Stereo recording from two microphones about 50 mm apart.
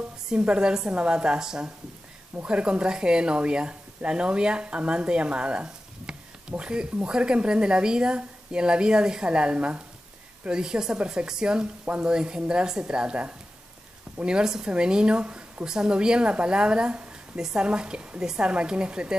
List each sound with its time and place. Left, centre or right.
0.3 s a woman's voice: centre
15.6 s a woman's voice: centre